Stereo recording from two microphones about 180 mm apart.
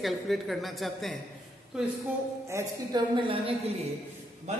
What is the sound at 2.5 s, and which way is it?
A woman's voice, 20° right (ahead or behind).